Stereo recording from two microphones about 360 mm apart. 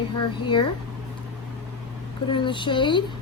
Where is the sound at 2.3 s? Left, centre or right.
Centre.